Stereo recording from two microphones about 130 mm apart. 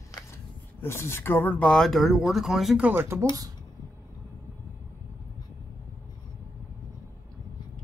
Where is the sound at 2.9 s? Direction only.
15° right (ahead or behind).